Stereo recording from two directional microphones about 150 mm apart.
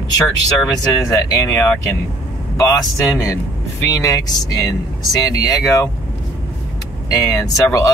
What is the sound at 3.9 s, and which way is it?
Speech, 25° left (ahead or behind).